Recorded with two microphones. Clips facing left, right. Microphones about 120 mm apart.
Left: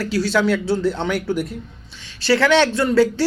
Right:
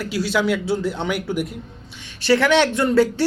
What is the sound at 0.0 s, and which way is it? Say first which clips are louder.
Speech: left 2 dB; 15° right (ahead or behind).